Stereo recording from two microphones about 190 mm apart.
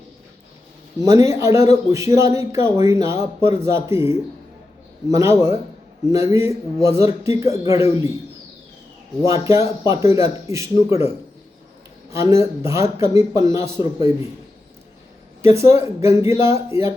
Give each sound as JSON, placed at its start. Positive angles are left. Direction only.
{"t": 1.0, "sound": "speech", "side_deg": -15}
{"t": 9.3, "sound": "speech", "side_deg": -15}
{"t": 12.1, "sound": "speech", "side_deg": -15}
{"t": 15.8, "sound": "speech", "side_deg": -15}